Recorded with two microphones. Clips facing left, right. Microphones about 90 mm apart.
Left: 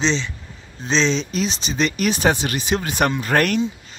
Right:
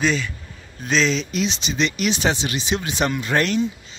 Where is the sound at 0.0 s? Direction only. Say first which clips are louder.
Even; 25° left (ahead or behind).